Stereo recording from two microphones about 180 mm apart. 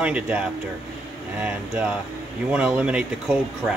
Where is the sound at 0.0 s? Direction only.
5° right (ahead or behind).